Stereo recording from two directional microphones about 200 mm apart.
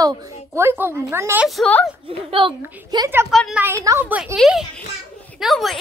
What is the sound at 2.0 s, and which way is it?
A woman's voice, 25° right (ahead or behind).